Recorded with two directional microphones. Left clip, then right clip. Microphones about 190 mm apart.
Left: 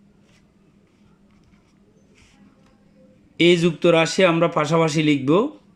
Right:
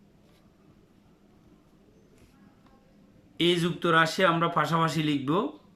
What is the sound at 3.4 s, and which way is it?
A man's voice, 25° left (ahead or behind).